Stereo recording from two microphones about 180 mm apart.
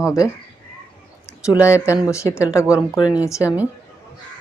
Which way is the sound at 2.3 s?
15° left (ahead or behind).